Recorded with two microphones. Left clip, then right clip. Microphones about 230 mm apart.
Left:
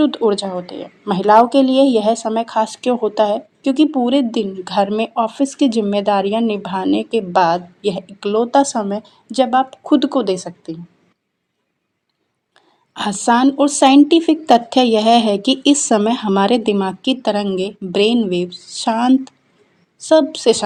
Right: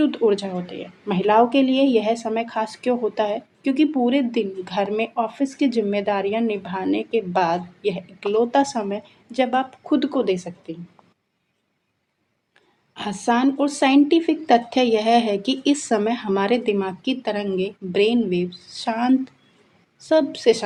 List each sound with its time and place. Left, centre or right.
0.0 s a woman's voice: left
12.9 s a woman's voice: left